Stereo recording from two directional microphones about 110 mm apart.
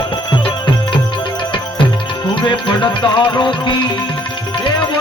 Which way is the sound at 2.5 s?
45° left (ahead or behind).